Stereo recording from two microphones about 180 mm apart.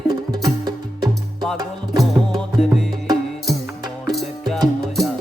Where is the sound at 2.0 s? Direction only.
Centre (ahead or behind).